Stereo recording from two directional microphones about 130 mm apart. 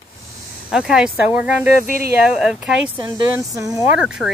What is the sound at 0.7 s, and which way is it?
Speech, 5° right (ahead or behind).